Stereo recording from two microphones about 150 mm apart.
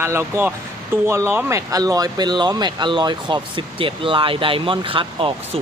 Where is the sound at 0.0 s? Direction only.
15° right (ahead or behind).